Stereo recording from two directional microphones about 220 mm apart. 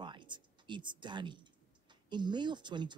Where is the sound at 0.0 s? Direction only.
20° right (ahead or behind).